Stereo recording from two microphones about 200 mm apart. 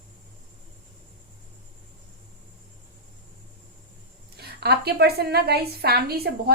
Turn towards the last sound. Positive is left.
turn(degrees=-50)  # may be behind; listen again after turning